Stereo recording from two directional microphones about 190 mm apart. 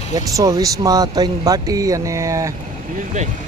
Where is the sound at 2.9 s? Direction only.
40° right (ahead or behind).